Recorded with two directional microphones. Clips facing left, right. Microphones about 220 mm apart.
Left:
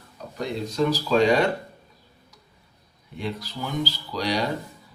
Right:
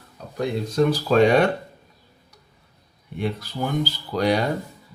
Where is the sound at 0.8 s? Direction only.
55° right (ahead or behind).